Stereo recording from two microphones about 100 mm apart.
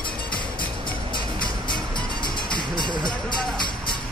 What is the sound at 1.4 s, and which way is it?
Music, 50° left (ahead or behind).